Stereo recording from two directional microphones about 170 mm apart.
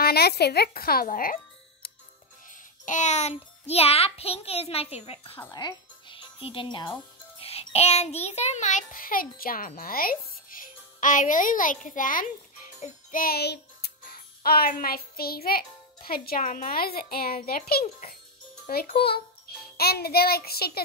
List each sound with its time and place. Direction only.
0.0 s a child's voice: 70° left (ahead or behind); by 5.4 s 35° left (ahead or behind)
5.5 s music: 25° left (ahead or behind); by 18.1 s 60° left (ahead or behind)
18.7 s child singing: 65° left (ahead or behind)